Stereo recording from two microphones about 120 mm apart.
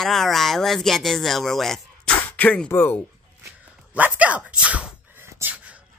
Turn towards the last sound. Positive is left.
turn(degrees=-10)  # may be behind; listen again after turning